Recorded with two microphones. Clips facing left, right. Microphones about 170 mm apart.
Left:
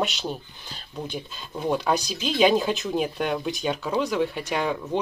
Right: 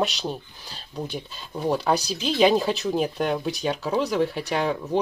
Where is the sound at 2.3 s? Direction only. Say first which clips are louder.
Right 1 dB; centre (ahead or behind).